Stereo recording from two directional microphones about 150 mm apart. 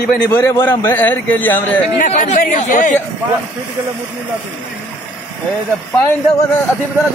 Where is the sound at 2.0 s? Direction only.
55° left (ahead or behind).